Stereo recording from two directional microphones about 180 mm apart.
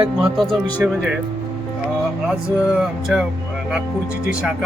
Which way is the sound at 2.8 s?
5° right (ahead or behind).